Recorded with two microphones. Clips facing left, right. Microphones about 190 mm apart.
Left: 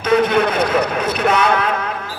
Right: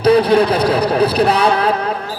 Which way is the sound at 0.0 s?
35° right (ahead or behind).